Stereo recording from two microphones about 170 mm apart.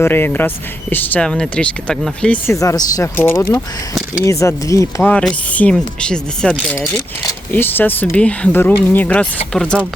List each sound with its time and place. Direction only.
0.0 s speech: 10° left (ahead or behind)
2.5 s speech: 20° left (ahead or behind)